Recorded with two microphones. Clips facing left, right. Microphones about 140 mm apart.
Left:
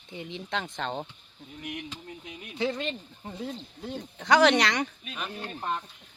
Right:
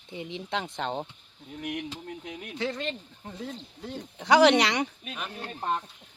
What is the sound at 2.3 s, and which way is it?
Speech, 60° right (ahead or behind).